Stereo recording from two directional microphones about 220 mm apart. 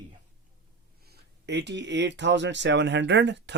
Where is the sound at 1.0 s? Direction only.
50° right (ahead or behind).